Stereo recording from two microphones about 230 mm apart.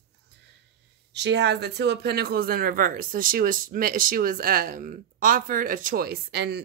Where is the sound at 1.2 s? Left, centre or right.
Right.